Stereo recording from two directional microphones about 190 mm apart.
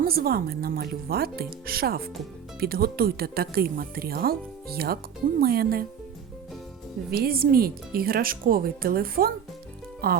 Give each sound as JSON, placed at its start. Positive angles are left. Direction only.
{"t": 0.0, "sound": "speech", "side_deg": -55}
{"t": 7.1, "sound": "speech", "side_deg": -50}